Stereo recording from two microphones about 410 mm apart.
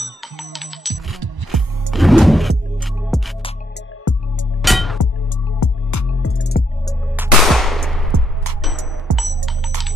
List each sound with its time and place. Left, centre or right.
0.0 s music: centre
4.1 s music: left
4.6 s music: centre
5.6 s music: left
7.2 s music: centre
9.1 s music: centre